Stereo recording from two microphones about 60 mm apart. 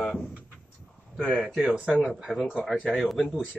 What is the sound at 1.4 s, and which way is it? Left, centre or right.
Speech, centre.